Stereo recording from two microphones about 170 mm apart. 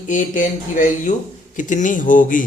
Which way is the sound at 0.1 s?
50° left (ahead or behind).